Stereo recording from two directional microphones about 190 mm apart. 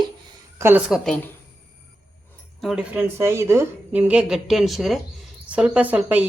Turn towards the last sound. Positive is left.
turn(degrees=-10)  # may be behind; listen again after turning